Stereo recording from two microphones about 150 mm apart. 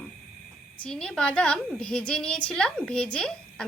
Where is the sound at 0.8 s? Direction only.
5° left (ahead or behind).